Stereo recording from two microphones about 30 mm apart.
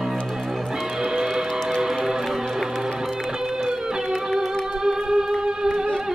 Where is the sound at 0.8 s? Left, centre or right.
Right.